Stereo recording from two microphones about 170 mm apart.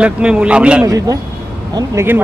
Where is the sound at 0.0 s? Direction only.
5° right (ahead or behind).